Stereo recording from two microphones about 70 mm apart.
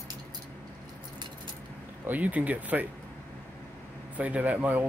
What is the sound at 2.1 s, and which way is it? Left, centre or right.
Speech, right.